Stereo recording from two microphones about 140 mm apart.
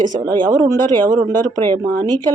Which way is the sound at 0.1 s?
30° right (ahead or behind).